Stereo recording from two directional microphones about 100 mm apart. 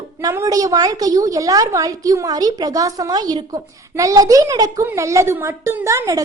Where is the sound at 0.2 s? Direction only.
35° right (ahead or behind).